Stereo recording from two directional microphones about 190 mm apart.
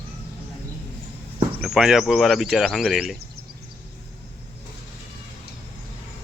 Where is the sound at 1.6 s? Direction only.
Centre (ahead or behind).